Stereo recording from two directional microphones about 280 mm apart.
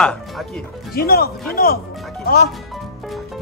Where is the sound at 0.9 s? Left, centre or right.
Left.